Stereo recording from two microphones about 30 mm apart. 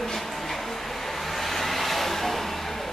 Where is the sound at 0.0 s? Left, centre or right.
Centre.